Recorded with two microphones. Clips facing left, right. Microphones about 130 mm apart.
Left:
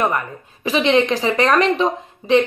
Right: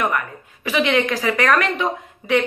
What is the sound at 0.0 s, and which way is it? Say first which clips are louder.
Speech: left 2 dB; 30° left (ahead or behind).